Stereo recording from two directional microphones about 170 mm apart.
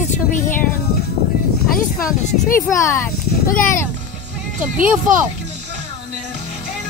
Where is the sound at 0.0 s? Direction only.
45° left (ahead or behind).